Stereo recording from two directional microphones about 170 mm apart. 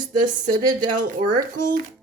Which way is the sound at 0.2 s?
50° right (ahead or behind).